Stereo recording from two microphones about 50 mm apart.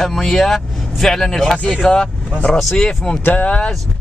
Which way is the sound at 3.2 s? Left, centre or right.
Left.